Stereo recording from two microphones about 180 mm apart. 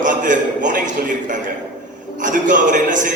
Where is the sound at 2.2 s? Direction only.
45° right (ahead or behind).